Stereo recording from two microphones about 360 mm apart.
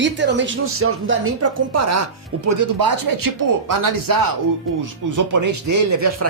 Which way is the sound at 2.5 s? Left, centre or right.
Right.